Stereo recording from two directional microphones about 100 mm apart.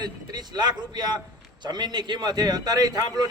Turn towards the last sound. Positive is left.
turn(degrees=-40)  # may be behind; listen again after turning